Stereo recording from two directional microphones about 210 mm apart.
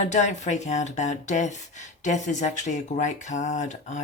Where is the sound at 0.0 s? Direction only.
35° left (ahead or behind).